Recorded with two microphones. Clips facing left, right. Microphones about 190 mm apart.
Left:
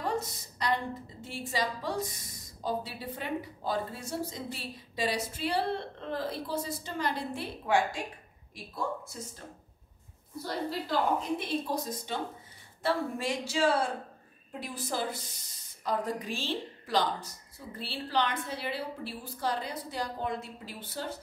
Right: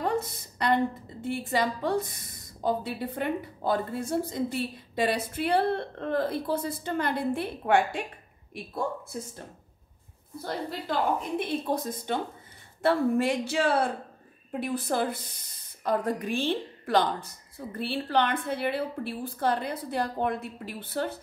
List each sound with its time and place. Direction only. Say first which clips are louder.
0.0 s a sound: right 4 dB; 55° right (ahead or behind)
1.2 s a woman's voice: right 6 dB; 55° right (ahead or behind)
10.4 s a woman's voice: right 1 dB; 55° right (ahead or behind)